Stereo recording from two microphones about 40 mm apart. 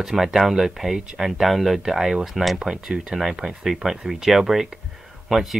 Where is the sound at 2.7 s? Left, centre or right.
Right.